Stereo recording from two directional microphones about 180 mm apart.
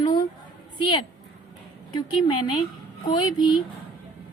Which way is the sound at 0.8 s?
25° left (ahead or behind).